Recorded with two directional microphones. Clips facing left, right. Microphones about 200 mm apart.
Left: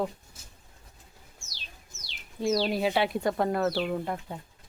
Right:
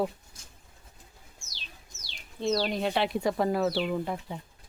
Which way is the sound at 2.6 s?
5° left (ahead or behind).